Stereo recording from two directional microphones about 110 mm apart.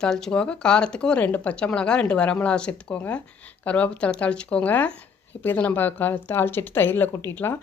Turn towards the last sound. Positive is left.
turn(degrees=20)  # may be behind; listen again after turning